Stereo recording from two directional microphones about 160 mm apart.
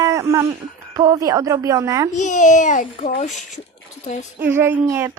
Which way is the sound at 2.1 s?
50° left (ahead or behind).